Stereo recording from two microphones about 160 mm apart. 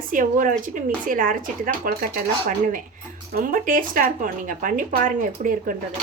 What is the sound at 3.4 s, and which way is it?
Speech, 60° right (ahead or behind).